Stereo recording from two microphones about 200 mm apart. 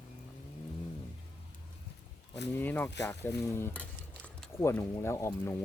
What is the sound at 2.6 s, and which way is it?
Speech, 10° left (ahead or behind).